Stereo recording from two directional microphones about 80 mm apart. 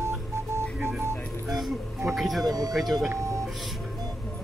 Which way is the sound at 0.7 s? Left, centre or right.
Centre.